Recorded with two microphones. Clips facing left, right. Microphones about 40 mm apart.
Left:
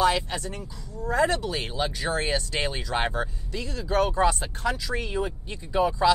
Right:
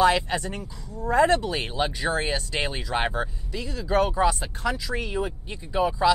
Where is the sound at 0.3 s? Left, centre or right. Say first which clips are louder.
Right 4 dB; right.